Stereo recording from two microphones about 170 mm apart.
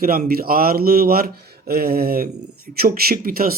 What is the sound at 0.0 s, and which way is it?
A man's voice, 60° right (ahead or behind).